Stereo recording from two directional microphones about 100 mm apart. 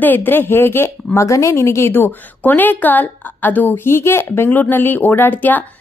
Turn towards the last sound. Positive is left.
turn(degrees=15)  # may be behind; listen again after turning